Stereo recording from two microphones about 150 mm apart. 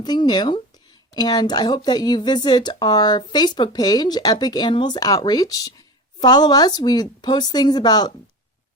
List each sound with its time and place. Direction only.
0.0 s speech: 30° left (ahead or behind)